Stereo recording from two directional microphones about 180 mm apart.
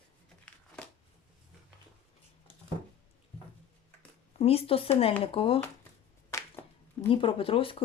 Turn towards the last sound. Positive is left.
turn(degrees=30)  # may be behind; listen again after turning